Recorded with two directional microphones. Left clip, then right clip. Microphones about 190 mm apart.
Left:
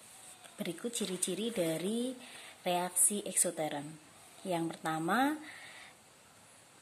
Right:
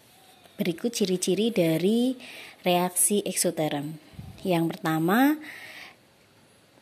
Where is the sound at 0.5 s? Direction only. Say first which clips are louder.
Right 11 dB; 30° right (ahead or behind).